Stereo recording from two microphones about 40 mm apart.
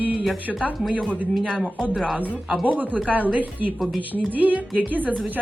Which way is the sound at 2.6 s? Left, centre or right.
Right.